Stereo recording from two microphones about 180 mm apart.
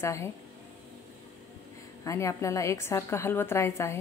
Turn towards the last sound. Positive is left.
turn(degrees=15)  # may be behind; listen again after turning